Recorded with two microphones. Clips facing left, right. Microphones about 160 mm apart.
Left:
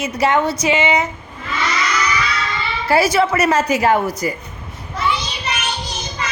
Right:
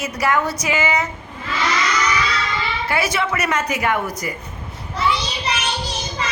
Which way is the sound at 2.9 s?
35° left (ahead or behind).